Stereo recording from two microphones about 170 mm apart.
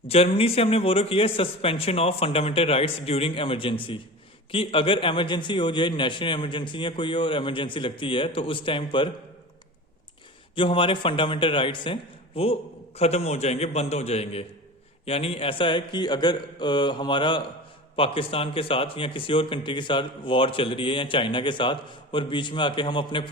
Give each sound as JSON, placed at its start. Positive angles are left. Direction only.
{"t": 0.1, "sound": "a man's voice", "side_deg": 35}
{"t": 10.5, "sound": "a man's voice", "side_deg": 30}